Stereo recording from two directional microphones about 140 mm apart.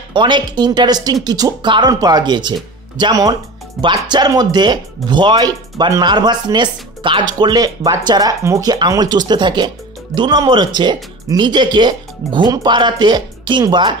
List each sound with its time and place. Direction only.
0.1 s speech: 35° right (ahead or behind)